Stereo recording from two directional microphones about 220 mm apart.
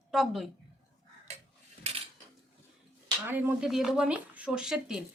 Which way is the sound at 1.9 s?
25° right (ahead or behind).